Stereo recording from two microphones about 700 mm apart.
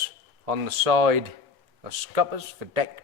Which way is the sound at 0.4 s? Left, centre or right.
Right.